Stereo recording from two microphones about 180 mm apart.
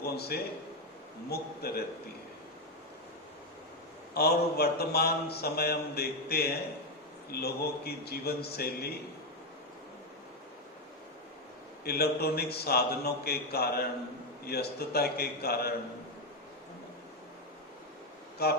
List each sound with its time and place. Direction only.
0.0 s a man's voice: 60° left (ahead or behind)
4.1 s a man's voice: 60° left (ahead or behind)
11.9 s a man's voice: 60° left (ahead or behind)
18.4 s a man's voice: 60° left (ahead or behind)